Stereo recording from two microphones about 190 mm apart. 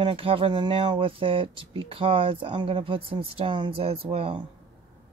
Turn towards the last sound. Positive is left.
turn(degrees=-30)  # may be behind; listen again after turning